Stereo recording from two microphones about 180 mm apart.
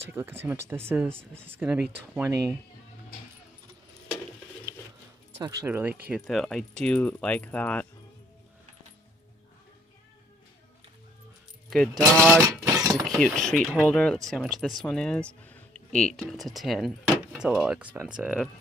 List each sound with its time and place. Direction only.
0.1 s speech: 10° right (ahead or behind)
5.4 s speech: 15° right (ahead or behind); by 7.8 s 10° left (ahead or behind)
12.1 s speech: centre (ahead or behind)
12.4 s a sound: 20° right (ahead or behind)
13.0 s speech: centre (ahead or behind)